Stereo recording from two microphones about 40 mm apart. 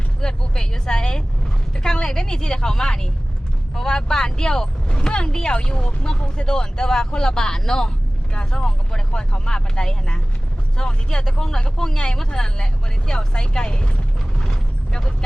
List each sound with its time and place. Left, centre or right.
0.2 s vehicle: centre
1.7 s a woman's voice: centre